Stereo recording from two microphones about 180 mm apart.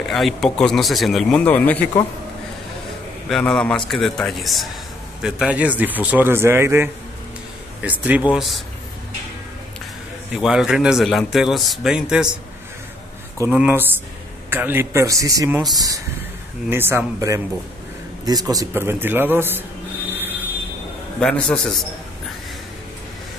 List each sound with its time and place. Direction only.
0.1 s a man's voice: centre (ahead or behind)
3.3 s a man's voice: 5° left (ahead or behind)
10.3 s a man's voice: 5° right (ahead or behind)
13.4 s a man's voice: 10° right (ahead or behind)
16.7 s a man's voice: 10° right (ahead or behind)
20.1 s a sound: 10° right (ahead or behind)
21.2 s a man's voice: 5° left (ahead or behind)